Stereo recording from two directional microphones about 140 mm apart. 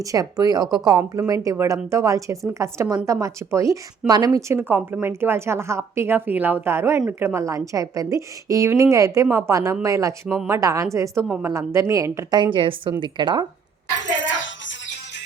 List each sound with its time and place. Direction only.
0.0 s a woman's voice: 25° right (ahead or behind)
10.2 s speech: centre (ahead or behind)
10.5 s a woman's voice: 25° right (ahead or behind)
12.5 s speech: 40° right (ahead or behind)